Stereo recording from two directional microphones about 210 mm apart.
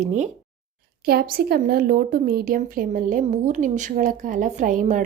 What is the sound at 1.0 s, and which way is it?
Speech, 45° right (ahead or behind).